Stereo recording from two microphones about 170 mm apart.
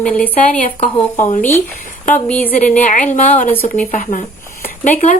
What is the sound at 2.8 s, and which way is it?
Speech, 50° left (ahead or behind).